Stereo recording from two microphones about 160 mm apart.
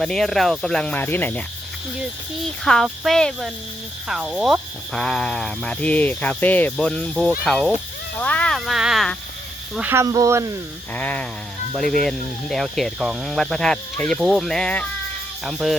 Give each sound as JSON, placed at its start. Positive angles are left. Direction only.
{"t": 0.0, "sound": "speech", "side_deg": 5}
{"t": 2.6, "sound": "speech", "side_deg": 0}
{"t": 9.7, "sound": "speech", "side_deg": -15}
{"t": 10.9, "sound": "a sound", "side_deg": 10}
{"t": 11.7, "sound": "speech", "side_deg": 5}